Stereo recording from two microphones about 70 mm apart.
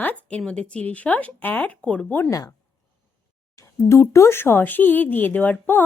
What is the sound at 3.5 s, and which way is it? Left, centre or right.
Speech, left.